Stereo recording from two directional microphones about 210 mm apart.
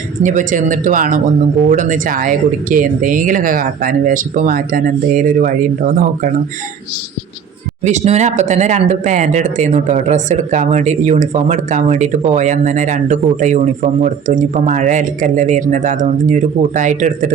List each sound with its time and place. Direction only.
0.2 s speech: 35° right (ahead or behind)
7.9 s speech: 35° right (ahead or behind)